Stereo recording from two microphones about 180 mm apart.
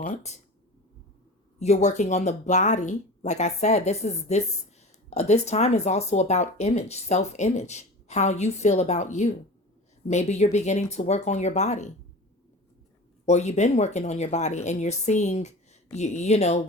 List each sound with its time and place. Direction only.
0.0 s speech: 40° left (ahead or behind)
1.5 s speech: 40° left (ahead or behind)
13.2 s speech: 40° left (ahead or behind)